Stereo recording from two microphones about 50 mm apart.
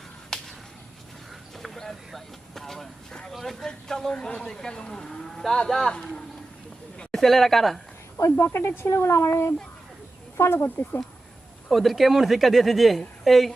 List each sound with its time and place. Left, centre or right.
0.3 s whip: centre
1.5 s vehicle: centre
3.2 s a woman's voice: centre
4.1 s a woman's voice: centre
8.2 s speech: left
10.4 s speech: left
10.8 s speech: left
11.7 s a woman's voice: centre